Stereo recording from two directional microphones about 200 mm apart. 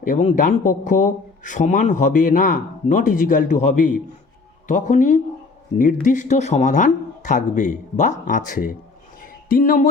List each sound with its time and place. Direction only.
0.1 s speech: 35° left (ahead or behind)